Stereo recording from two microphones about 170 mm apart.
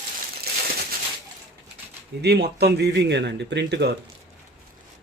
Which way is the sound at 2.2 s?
75° right (ahead or behind).